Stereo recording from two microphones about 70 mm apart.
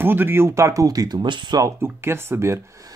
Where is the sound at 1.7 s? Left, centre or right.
Right.